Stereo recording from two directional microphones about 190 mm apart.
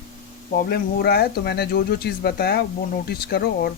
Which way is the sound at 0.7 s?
55° left (ahead or behind).